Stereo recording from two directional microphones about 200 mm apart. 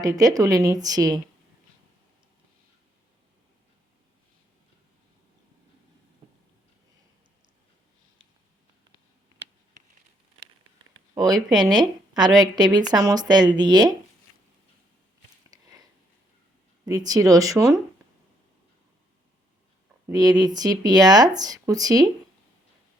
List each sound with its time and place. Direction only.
0.0 s a woman's voice: 20° right (ahead or behind)
11.1 s a woman's voice: 20° right (ahead or behind)
15.5 s a sound: 20° right (ahead or behind)
16.8 s a woman's voice: 20° right (ahead or behind)
20.1 s a woman's voice: 20° right (ahead or behind)